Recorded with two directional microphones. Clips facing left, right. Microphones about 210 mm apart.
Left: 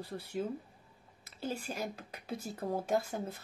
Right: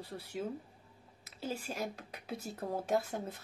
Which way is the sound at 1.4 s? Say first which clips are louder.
Left 1 dB; centre (ahead or behind).